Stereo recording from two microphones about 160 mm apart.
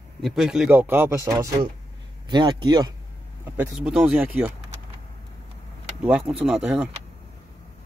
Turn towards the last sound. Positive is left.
turn(degrees=-5)  # may be behind; listen again after turning